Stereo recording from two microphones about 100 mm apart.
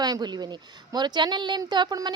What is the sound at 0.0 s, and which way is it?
Speech, 45° right (ahead or behind).